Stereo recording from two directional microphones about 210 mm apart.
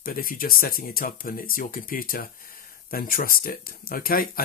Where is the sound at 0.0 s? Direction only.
40° left (ahead or behind).